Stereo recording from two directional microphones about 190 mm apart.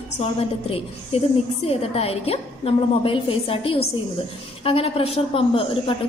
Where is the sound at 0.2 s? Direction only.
30° left (ahead or behind).